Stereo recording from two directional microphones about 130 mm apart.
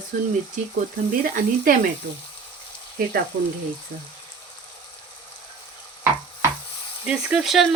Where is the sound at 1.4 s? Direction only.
90° right.